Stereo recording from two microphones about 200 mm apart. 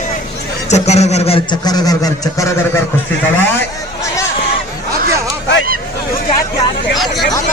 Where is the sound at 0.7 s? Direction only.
35° left (ahead or behind); by 2.5 s 15° left (ahead or behind).